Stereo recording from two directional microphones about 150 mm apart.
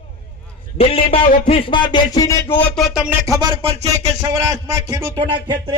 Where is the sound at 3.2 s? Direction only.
25° right (ahead or behind).